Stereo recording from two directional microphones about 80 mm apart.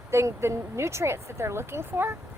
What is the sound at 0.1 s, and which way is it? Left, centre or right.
Speech, right.